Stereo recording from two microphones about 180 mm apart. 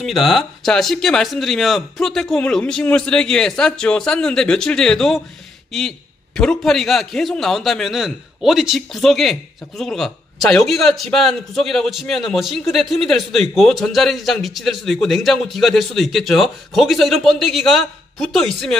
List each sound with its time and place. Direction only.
0.0 s a man's voice: centre (ahead or behind)